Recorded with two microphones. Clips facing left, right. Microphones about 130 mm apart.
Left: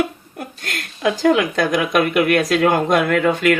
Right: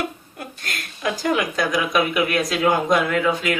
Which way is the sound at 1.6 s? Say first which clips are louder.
Left 3 dB; 55° left (ahead or behind).